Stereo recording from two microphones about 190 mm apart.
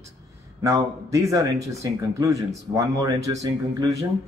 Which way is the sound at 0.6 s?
15° right (ahead or behind).